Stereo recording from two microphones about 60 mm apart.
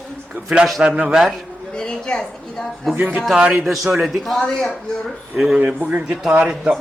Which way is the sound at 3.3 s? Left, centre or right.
Centre.